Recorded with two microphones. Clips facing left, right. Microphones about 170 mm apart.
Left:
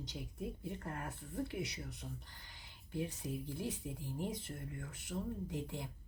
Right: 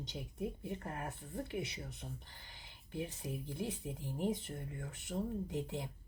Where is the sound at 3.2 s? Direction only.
20° right (ahead or behind).